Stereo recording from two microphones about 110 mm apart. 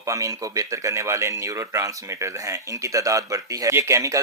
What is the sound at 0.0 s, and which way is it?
Speech, 30° right (ahead or behind).